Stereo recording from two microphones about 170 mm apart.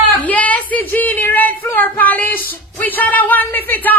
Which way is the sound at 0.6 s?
55° right (ahead or behind).